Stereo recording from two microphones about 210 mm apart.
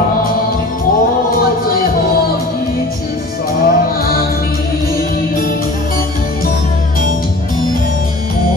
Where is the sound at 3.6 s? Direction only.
45° left (ahead or behind).